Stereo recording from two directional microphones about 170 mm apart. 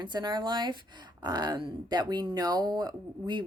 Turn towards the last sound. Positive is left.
turn(degrees=-25)  # may be behind; listen again after turning